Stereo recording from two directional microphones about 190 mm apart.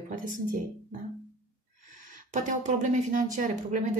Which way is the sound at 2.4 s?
40° right (ahead or behind).